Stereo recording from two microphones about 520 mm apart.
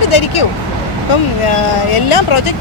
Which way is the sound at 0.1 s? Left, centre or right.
Left.